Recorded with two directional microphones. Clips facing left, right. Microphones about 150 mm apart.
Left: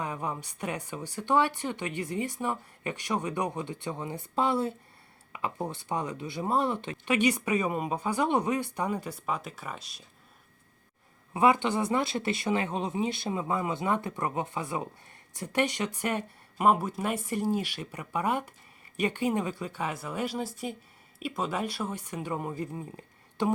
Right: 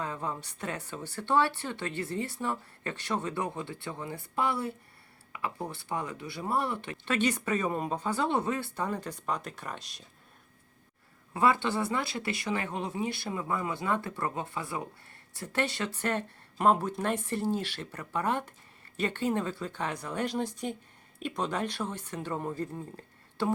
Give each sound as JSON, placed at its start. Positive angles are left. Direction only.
{"t": 0.0, "sound": "speech", "side_deg": 15}
{"t": 11.3, "sound": "speech", "side_deg": 15}